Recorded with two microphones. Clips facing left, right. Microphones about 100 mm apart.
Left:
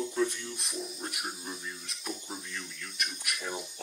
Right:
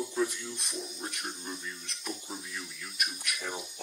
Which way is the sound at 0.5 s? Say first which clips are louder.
Left 1 dB; centre (ahead or behind).